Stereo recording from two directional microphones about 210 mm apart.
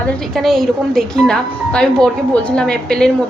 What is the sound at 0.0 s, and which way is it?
Speech, centre (ahead or behind).